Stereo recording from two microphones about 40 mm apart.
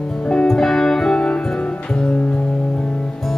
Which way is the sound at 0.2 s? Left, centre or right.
Centre.